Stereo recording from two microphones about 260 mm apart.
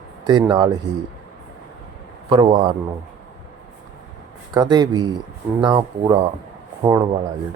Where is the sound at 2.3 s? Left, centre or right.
Centre.